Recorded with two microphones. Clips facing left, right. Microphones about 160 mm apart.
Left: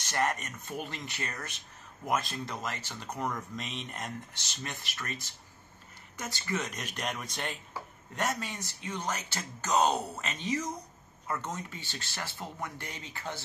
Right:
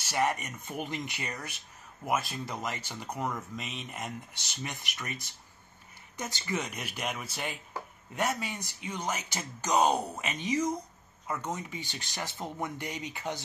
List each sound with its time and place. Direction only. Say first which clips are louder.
0.0 s speech: right 2 dB; 10° right (ahead or behind)